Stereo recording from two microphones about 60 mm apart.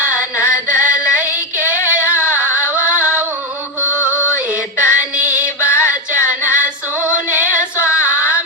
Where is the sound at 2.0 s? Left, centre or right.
Left.